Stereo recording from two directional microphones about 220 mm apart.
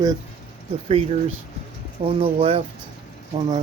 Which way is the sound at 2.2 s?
25° right (ahead or behind).